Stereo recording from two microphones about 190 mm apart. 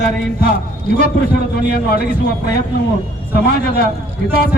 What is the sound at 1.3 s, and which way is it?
Speech, 55° left (ahead or behind).